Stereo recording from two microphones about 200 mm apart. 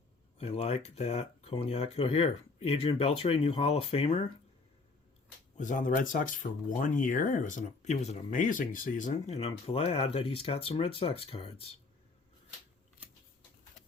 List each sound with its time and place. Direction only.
0.3 s speech: 30° left (ahead or behind)
5.5 s speech: 40° left (ahead or behind)